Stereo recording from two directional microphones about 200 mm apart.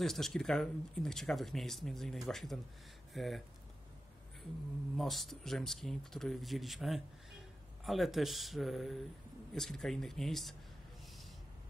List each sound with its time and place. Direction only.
0.0 s speech: centre (ahead or behind)
4.9 s speech: centre (ahead or behind)